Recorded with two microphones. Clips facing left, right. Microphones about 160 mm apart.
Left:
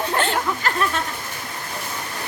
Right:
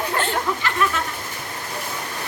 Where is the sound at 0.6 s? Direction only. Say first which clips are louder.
Left 2 dB; 40° left (ahead or behind).